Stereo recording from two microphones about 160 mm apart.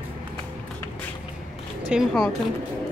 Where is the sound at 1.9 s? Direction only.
Centre (ahead or behind).